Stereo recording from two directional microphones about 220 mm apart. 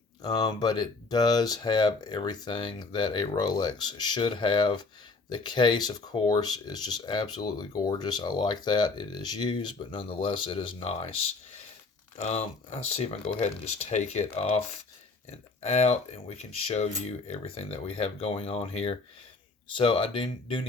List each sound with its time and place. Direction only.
0.2 s speech: 20° left (ahead or behind)
12.2 s speech: 30° left (ahead or behind)